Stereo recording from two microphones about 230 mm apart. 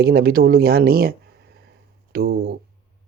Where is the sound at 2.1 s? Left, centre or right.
Right.